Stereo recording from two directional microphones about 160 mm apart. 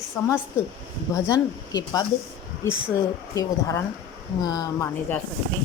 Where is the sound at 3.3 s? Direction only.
20° left (ahead or behind).